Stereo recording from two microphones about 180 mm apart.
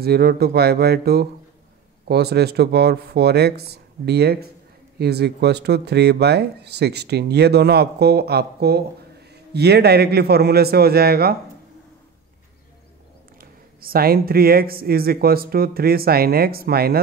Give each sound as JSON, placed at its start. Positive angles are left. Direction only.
{"t": 0.0, "sound": "speech", "side_deg": -60}
{"t": 13.4, "sound": "speech", "side_deg": -55}